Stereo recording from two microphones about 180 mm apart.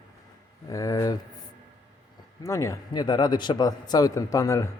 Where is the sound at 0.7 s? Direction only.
20° left (ahead or behind).